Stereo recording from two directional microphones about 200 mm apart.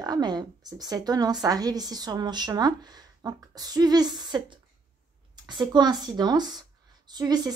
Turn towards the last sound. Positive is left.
turn(degrees=-20)  # may be behind; listen again after turning